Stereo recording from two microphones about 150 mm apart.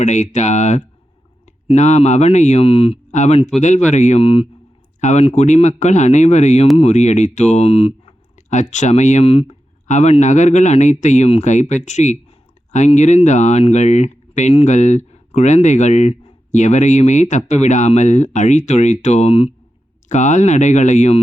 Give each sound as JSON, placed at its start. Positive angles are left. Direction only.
{"t": 0.0, "sound": "speech", "side_deg": 50}
{"t": 4.9, "sound": "speech", "side_deg": 50}
{"t": 8.4, "sound": "speech", "side_deg": 55}